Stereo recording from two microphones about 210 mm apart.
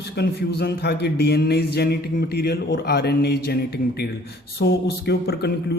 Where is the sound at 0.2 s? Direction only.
50° left (ahead or behind).